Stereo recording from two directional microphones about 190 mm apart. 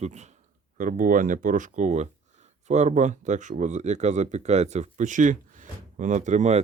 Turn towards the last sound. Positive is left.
turn(degrees=-35)  # may be behind; listen again after turning